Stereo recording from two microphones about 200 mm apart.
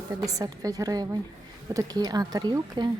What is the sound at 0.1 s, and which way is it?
A woman's voice, 15° right (ahead or behind).